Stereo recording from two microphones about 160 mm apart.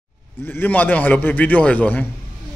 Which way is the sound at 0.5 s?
10° left (ahead or behind).